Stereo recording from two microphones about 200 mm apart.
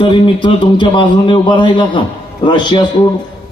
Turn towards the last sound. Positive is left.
turn(degrees=20)  # may be behind; listen again after turning